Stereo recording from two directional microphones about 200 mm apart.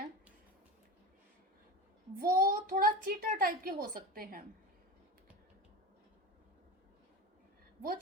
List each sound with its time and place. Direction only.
2.1 s a child's voice: 45° right (ahead or behind)